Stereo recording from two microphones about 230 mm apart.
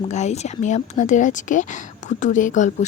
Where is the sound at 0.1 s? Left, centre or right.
Left.